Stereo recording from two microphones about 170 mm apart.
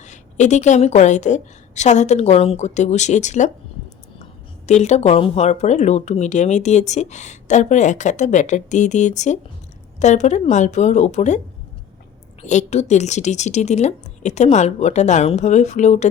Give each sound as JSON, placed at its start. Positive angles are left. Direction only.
{"t": 0.0, "sound": "speech", "side_deg": 45}
{"t": 12.4, "sound": "speech", "side_deg": 40}